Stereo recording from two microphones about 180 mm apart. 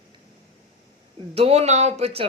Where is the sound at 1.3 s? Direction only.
35° right (ahead or behind).